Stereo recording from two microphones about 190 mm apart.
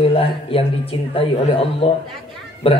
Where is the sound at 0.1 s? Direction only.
30° left (ahead or behind).